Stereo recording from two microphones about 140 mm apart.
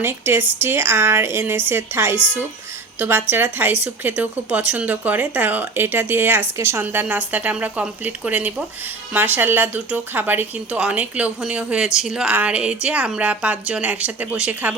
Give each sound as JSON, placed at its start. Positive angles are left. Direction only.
{"t": 0.0, "sound": "a woman's voice", "side_deg": -15}